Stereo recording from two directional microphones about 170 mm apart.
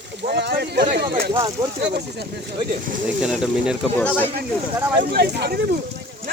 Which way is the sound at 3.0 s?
5° right (ahead or behind).